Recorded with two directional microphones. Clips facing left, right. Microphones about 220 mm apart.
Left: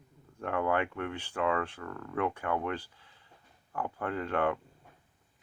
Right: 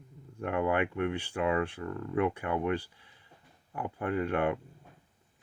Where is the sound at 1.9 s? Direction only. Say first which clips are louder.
Right 5 dB; 25° right (ahead or behind).